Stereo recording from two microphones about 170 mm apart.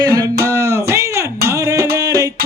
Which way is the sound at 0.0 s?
20° right (ahead or behind).